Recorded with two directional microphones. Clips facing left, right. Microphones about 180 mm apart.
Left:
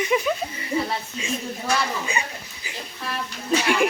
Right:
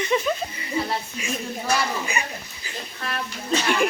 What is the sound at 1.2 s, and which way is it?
Speech, 25° left (ahead or behind).